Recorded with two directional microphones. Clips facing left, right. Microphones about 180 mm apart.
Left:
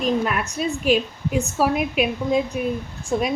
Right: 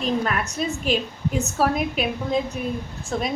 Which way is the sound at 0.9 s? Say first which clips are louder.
Left 6 dB; 10° left (ahead or behind).